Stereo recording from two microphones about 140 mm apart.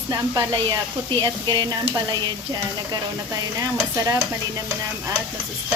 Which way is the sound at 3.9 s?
25° right (ahead or behind).